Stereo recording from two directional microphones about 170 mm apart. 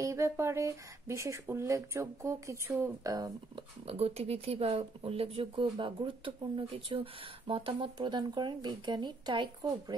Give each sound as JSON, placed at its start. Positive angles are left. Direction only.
{"t": 0.0, "sound": "speech", "side_deg": -15}
{"t": 3.8, "sound": "speech", "side_deg": -35}